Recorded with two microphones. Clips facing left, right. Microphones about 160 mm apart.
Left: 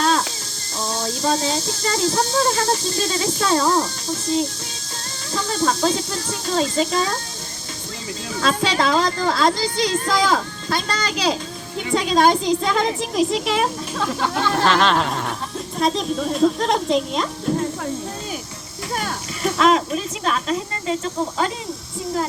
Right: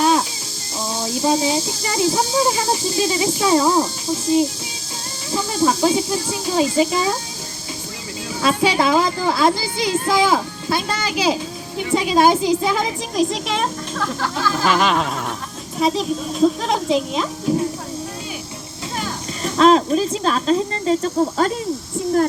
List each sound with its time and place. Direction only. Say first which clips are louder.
0.0 s music: right 3 dB; 10° right (ahead or behind)
0.9 s speech: right 3 dB; 10° right (ahead or behind)
5.3 s speech: right 3 dB; 10° right (ahead or behind)
8.4 s a woman's voice: right 3 dB; 10° right (ahead or behind)
14.0 s a sound: left 1 dB; 20° left (ahead or behind)
14.6 s a woman's voice: even; 5° right (ahead or behind)
19.4 s speech: right 3 dB; 35° right (ahead or behind)